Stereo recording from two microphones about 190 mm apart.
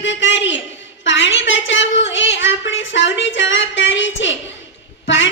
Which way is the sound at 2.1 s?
75° left (ahead or behind).